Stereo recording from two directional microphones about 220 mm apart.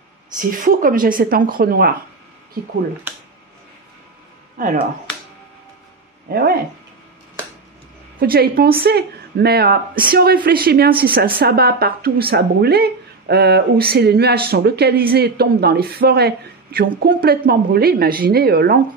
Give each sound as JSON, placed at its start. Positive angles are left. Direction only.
{"t": 0.4, "sound": "speech", "side_deg": -40}
{"t": 4.6, "sound": "speech", "side_deg": -40}
{"t": 6.2, "sound": "speech", "side_deg": -45}
{"t": 8.2, "sound": "speech", "side_deg": -45}